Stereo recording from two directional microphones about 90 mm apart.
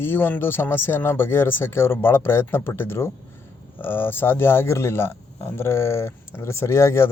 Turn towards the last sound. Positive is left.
turn(degrees=30)  # may be behind; listen again after turning